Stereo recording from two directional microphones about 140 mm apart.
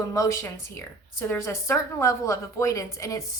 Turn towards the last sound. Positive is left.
turn(degrees=25)  # may be behind; listen again after turning